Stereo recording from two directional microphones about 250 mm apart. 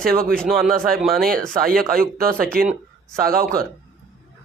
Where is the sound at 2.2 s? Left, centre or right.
Right.